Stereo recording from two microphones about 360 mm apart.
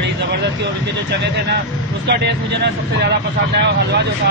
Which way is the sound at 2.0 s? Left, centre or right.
Right.